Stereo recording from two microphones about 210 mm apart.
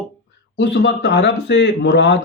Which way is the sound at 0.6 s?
55° left (ahead or behind).